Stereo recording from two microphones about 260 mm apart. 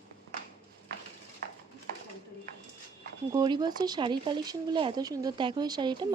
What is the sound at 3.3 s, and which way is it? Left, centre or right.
Speech, centre.